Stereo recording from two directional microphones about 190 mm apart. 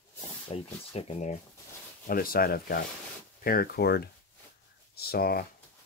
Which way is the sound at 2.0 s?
50° left (ahead or behind).